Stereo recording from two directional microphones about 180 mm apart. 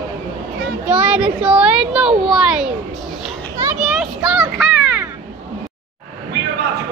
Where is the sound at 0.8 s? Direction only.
5° right (ahead or behind).